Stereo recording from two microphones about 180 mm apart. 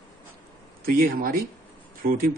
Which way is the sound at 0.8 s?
55° right (ahead or behind).